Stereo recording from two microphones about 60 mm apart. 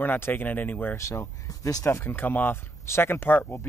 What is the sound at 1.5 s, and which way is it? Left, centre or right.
Speech, left.